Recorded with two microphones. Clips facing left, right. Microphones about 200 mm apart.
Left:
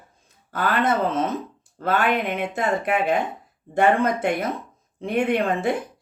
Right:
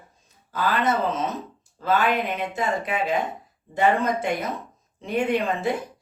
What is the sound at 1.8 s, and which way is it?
Speech, 55° left (ahead or behind).